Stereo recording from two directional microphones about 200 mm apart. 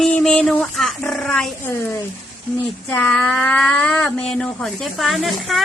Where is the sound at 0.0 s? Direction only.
5° left (ahead or behind).